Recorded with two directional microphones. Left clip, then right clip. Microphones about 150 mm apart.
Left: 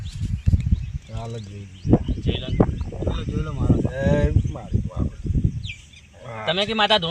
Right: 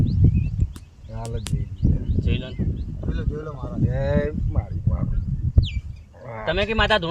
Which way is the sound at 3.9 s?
10° left (ahead or behind).